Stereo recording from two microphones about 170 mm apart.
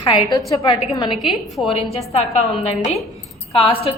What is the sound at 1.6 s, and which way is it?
Speech, 35° left (ahead or behind).